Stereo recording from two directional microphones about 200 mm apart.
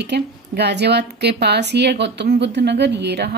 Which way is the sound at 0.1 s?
55° right (ahead or behind).